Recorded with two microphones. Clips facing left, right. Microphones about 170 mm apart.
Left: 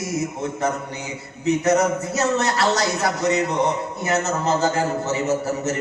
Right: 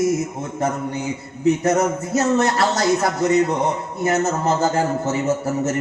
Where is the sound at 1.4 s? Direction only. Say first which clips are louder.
Right 1 dB; 50° right (ahead or behind).